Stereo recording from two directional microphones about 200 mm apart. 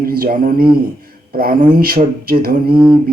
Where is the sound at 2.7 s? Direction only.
10° right (ahead or behind).